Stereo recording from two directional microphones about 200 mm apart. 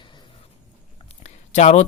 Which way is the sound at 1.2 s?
35° left (ahead or behind).